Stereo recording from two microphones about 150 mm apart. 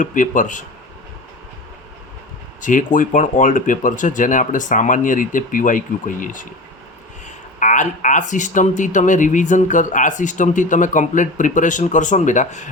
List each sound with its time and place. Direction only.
0.0 s speech: 60° left (ahead or behind)
2.6 s speech: 60° left (ahead or behind)
7.6 s speech: 55° left (ahead or behind)